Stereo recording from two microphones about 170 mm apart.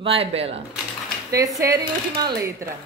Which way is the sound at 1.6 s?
20° right (ahead or behind).